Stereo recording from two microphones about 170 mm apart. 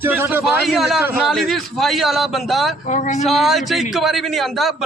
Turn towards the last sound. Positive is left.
turn(degrees=0)  # may be behind; listen again after turning